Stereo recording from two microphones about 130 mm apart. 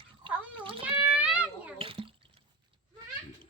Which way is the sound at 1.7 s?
45° right (ahead or behind).